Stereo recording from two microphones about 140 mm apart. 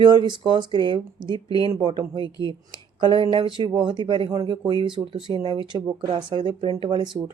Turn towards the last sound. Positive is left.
turn(degrees=-35)  # may be behind; listen again after turning